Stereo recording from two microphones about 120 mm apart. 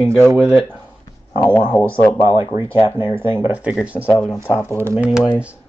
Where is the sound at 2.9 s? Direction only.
40° left (ahead or behind).